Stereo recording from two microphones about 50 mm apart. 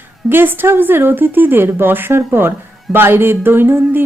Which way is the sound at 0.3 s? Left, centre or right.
Right.